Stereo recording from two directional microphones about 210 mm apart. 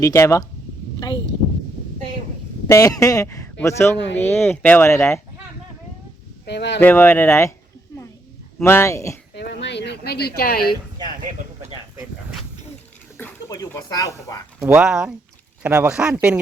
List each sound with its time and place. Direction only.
0.0 s speech: 15° left (ahead or behind)
2.6 s speech: 15° left (ahead or behind)
6.4 s speech: 55° left (ahead or behind)
6.7 s speech: 10° left (ahead or behind)
7.9 s a sound: 15° left (ahead or behind)
8.5 s speech: 10° left (ahead or behind)
9.3 s a woman's voice: 55° left (ahead or behind)
13.1 s speech: 15° left (ahead or behind)
14.6 s speech: 5° right (ahead or behind)